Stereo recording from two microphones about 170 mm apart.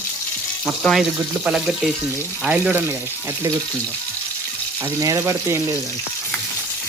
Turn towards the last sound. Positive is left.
turn(degrees=-15)  # may be behind; listen again after turning